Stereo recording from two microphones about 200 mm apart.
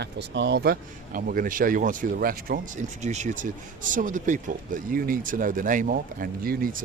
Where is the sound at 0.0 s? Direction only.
60° right (ahead or behind).